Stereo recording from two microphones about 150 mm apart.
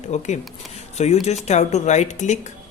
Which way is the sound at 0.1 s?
50° left (ahead or behind).